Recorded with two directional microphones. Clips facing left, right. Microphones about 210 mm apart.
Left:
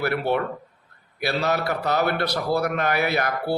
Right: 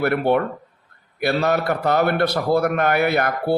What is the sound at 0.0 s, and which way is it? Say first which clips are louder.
Speech: right 5 dB; 50° right (ahead or behind).